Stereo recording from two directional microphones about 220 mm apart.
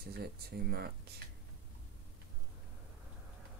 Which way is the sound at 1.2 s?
45° right (ahead or behind).